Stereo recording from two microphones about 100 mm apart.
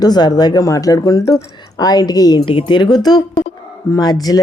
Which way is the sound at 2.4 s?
60° left (ahead or behind).